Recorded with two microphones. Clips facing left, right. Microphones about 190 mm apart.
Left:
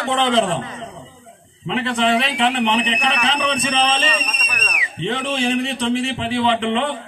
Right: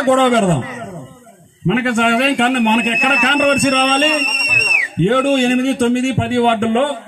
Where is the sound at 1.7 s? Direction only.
60° right (ahead or behind).